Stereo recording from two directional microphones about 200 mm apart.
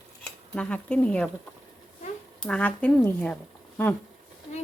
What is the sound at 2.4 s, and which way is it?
Speech, 5° left (ahead or behind).